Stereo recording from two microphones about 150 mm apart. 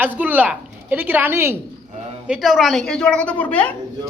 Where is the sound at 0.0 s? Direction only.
10° right (ahead or behind).